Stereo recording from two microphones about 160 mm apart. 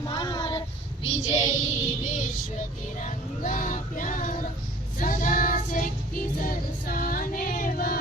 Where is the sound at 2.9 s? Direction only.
50° left (ahead or behind).